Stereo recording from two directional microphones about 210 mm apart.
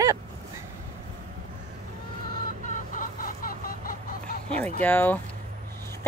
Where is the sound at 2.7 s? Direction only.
40° left (ahead or behind).